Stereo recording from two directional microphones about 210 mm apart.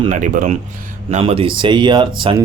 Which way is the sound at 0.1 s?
40° right (ahead or behind).